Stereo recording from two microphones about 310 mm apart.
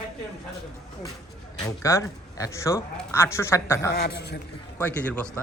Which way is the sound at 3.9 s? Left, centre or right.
Left.